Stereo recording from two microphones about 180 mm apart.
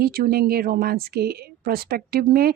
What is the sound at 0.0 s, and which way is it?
A woman's voice, 55° right (ahead or behind).